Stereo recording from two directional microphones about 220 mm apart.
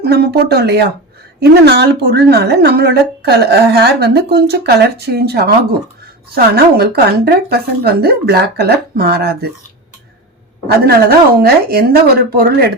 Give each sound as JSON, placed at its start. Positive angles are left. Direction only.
{"t": 0.0, "sound": "speech", "side_deg": -45}
{"t": 10.8, "sound": "speech", "side_deg": -45}